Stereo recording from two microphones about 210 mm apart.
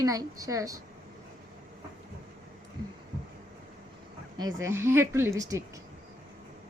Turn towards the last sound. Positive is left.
turn(degrees=-15)  # may be behind; listen again after turning